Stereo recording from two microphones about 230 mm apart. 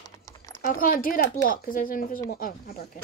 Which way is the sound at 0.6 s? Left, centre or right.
Left.